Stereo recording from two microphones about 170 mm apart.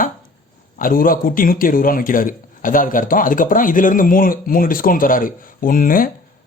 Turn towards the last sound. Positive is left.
turn(degrees=55)  # may be behind; listen again after turning